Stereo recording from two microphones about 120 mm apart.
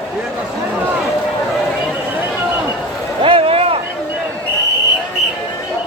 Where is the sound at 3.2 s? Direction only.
50° right (ahead or behind).